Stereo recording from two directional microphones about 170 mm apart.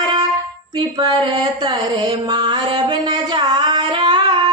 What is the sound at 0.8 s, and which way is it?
Mantra, 25° right (ahead or behind).